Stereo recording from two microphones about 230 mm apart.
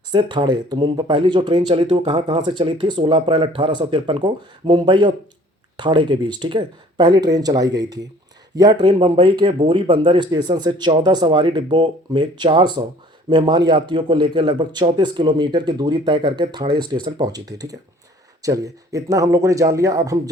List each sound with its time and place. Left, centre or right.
0.1 s speech: centre